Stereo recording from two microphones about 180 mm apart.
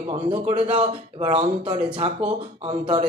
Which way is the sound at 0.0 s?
30° right (ahead or behind).